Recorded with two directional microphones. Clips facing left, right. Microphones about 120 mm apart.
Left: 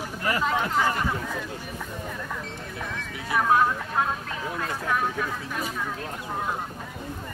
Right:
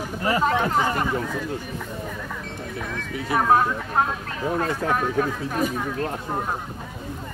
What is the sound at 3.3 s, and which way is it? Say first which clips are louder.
Speech: right 2 dB; 40° right (ahead or behind).